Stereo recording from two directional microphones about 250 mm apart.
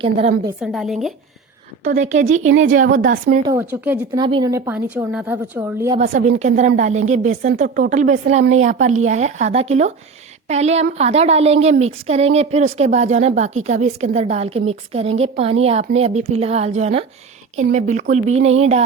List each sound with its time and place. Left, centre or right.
0.0 s a woman's voice: right
0.6 s speech: centre
1.8 s a woman's voice: right
3.4 s a woman's voice: centre
6.4 s a woman's voice: right